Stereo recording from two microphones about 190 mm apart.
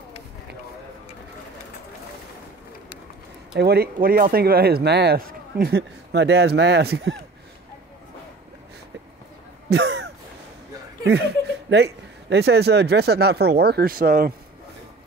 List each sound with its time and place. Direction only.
3.5 s speech: 55° right (ahead or behind)
9.7 s a sound: 65° right (ahead or behind)
11.1 s speech: 60° right (ahead or behind)